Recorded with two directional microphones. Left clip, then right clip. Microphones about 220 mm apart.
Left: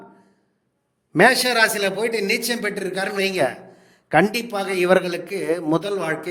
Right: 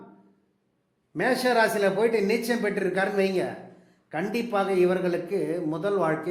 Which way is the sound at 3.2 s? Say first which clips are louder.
Left 5 dB; 45° left (ahead or behind).